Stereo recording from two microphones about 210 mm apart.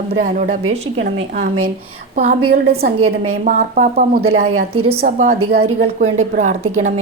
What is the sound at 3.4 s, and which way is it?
Speech, 40° right (ahead or behind).